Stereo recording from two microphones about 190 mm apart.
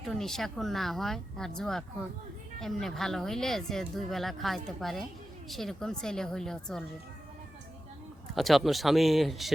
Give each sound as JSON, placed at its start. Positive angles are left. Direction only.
{"t": 0.0, "sound": "speech", "side_deg": 0}
{"t": 8.4, "sound": "speech", "side_deg": 0}